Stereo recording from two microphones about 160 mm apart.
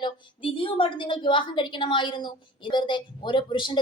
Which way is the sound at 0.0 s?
35° left (ahead or behind).